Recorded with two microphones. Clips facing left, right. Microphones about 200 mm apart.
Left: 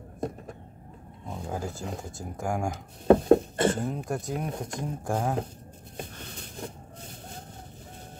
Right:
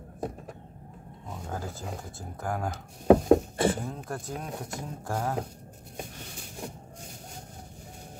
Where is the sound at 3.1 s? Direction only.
10° right (ahead or behind).